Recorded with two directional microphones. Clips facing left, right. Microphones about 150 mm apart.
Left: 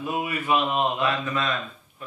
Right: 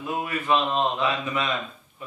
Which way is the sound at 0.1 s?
10° left (ahead or behind).